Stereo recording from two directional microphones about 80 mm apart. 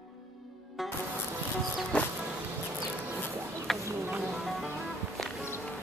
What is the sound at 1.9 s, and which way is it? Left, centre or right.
Music, centre.